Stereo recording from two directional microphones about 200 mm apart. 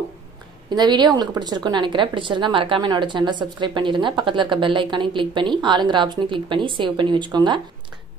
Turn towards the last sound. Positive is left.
turn(degrees=-20)  # may be behind; listen again after turning